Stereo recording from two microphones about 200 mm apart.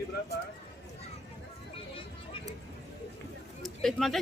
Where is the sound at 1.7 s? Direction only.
25° left (ahead or behind).